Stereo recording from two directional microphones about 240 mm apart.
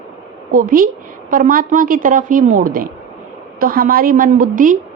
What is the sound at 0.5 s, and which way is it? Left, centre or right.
A woman's voice, right.